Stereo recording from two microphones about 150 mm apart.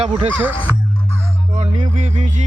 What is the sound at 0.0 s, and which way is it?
Music, 40° right (ahead or behind).